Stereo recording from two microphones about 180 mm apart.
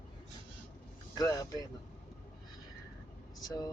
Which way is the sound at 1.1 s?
20° left (ahead or behind).